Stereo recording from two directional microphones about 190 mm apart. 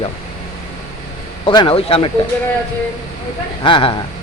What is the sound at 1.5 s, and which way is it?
Speech, 25° left (ahead or behind).